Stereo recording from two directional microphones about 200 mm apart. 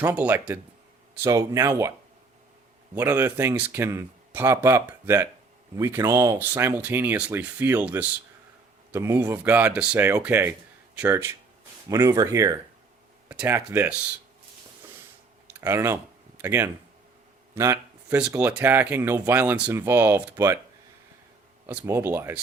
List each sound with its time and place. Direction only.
0.0 s speech: 5° right (ahead or behind)
2.9 s speech: 10° right (ahead or behind)
15.6 s speech: 15° right (ahead or behind)
21.7 s speech: 10° right (ahead or behind)